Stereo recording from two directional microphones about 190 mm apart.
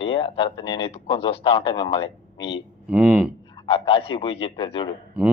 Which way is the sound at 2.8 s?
5° right (ahead or behind).